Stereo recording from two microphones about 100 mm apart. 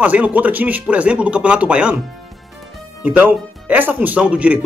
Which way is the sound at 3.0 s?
15° right (ahead or behind).